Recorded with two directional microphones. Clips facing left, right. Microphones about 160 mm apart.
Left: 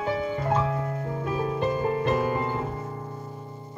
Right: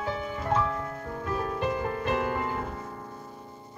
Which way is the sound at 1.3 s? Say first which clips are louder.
Left 2 dB; 20° left (ahead or behind).